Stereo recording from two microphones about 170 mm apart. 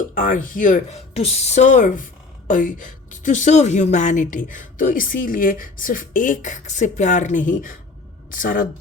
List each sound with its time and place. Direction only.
0.0 s a woman's voice: 55° left (ahead or behind)